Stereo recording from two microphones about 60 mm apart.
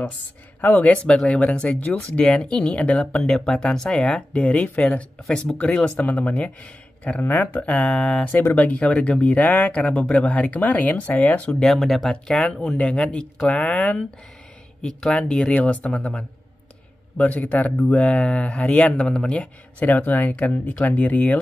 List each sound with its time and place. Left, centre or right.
0.6 s speech: left
3.1 s speech: centre; by 11.5 s left
11.6 s speech: centre
12.1 s speech: centre
14.8 s speech: centre
15.9 s speech: centre
17.2 s speech: left
18.0 s speech: centre